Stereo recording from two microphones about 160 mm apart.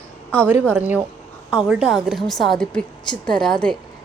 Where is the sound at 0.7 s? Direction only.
10° right (ahead or behind).